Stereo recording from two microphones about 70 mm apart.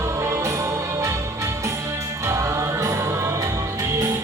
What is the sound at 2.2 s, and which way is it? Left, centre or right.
Music, right.